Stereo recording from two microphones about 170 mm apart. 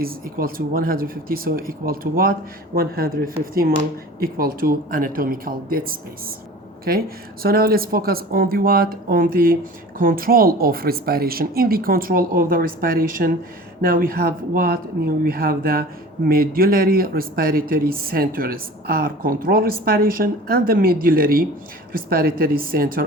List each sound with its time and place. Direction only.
0.0 s speech: 60° right (ahead or behind)